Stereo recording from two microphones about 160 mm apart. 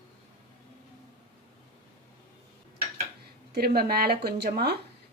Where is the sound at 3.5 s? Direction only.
75° right (ahead or behind).